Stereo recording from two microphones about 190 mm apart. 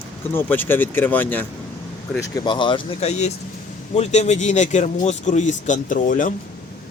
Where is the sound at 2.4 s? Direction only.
25° left (ahead or behind); by 6.3 s 45° left (ahead or behind).